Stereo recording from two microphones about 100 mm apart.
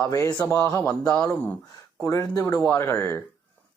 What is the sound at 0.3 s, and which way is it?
Speech, 15° left (ahead or behind).